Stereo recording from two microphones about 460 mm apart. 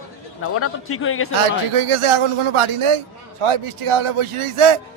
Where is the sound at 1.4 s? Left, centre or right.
Right.